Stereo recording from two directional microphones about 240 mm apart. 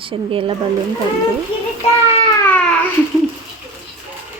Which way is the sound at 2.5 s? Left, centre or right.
Centre.